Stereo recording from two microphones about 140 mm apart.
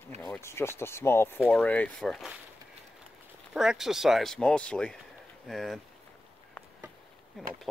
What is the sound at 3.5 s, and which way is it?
Speech, 5° right (ahead or behind).